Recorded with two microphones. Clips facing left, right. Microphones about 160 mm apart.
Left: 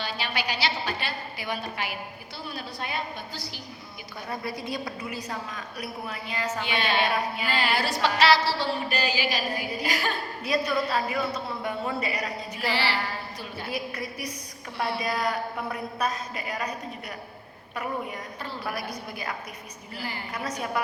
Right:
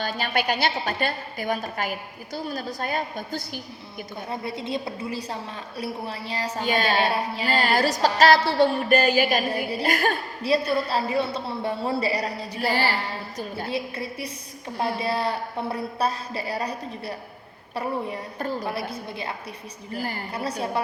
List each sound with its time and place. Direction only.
0.0 s a woman's voice: 45° right (ahead or behind)
4.3 s a woman's voice: 25° right (ahead or behind); by 10.2 s 50° right (ahead or behind)
10.4 s a woman's voice: 30° right (ahead or behind)
13.7 s a woman's voice: 30° right (ahead or behind)
18.6 s a woman's voice: 25° right (ahead or behind)
19.9 s a woman's voice: 45° right (ahead or behind)
20.3 s a woman's voice: 30° right (ahead or behind)